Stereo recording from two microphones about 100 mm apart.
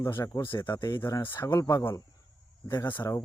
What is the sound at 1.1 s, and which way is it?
Speech, 25° left (ahead or behind).